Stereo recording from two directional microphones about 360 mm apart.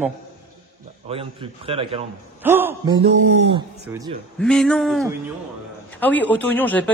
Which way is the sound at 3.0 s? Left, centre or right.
Centre.